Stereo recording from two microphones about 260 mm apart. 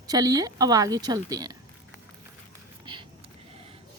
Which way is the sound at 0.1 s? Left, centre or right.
Centre.